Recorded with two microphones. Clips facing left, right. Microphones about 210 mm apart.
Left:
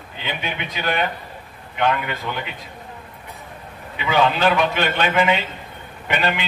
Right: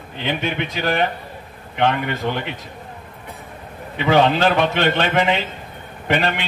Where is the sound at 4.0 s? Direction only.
45° right (ahead or behind).